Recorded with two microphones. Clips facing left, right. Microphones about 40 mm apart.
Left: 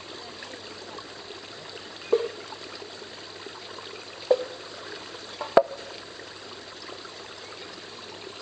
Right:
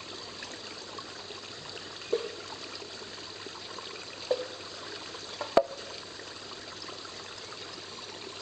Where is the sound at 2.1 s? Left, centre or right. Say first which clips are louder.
Left 7 dB; left.